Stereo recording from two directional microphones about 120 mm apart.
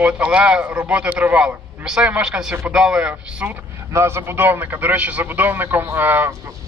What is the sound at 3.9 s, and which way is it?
Speech, 25° right (ahead or behind).